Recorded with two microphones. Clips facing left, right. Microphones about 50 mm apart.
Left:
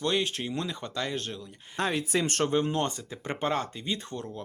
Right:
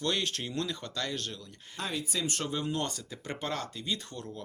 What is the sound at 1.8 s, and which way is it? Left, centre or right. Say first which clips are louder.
Speech: left 7 dB; left.